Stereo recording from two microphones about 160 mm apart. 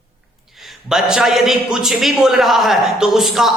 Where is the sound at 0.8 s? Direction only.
5° right (ahead or behind).